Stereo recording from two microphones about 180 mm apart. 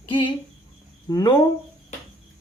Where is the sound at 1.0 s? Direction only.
20° left (ahead or behind).